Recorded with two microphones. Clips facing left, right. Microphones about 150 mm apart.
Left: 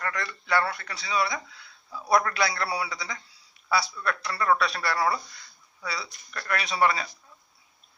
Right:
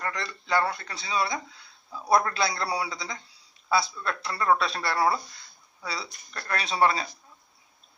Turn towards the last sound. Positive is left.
turn(degrees=-30)  # may be behind; listen again after turning